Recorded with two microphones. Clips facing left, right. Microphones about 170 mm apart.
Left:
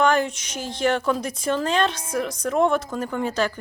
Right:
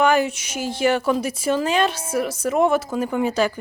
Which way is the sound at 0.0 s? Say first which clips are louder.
Right 2 dB; 5° right (ahead or behind).